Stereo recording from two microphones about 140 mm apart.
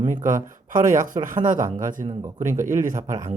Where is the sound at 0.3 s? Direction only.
65° right (ahead or behind).